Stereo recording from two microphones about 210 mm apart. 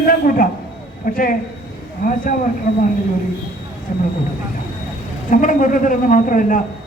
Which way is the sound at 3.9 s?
40° left (ahead or behind).